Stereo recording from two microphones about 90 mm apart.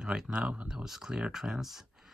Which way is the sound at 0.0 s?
5° right (ahead or behind).